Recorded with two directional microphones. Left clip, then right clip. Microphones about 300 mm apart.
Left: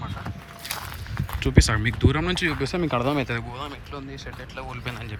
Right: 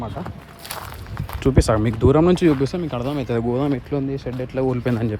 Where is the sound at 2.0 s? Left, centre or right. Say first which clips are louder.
Right 8 dB; centre.